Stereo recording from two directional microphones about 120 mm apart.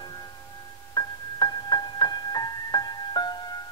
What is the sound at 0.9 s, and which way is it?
Keyboard, 35° left (ahead or behind).